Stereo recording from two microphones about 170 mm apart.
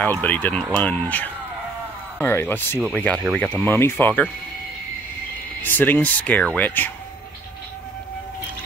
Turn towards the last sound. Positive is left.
turn(degrees=10)  # may be behind; listen again after turning